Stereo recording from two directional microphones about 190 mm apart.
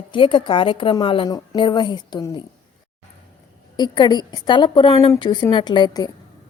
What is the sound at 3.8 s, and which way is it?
A woman's voice, 25° left (ahead or behind).